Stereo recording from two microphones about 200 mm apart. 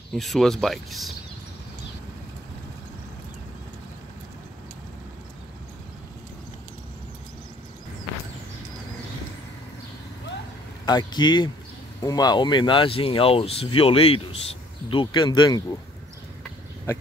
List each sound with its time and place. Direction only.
0.1 s speech: centre (ahead or behind)
10.9 s speech: 20° left (ahead or behind)